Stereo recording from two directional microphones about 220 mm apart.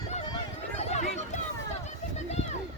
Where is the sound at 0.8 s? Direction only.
30° left (ahead or behind).